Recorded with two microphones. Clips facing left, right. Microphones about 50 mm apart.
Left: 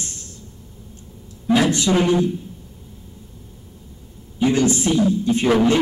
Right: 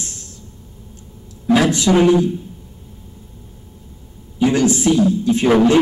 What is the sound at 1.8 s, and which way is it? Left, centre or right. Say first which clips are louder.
Speech: right 5 dB; right.